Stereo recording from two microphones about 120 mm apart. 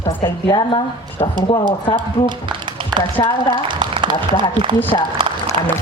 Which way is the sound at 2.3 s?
40° right (ahead or behind).